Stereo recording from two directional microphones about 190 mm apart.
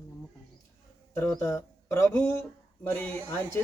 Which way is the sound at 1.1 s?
10° left (ahead or behind).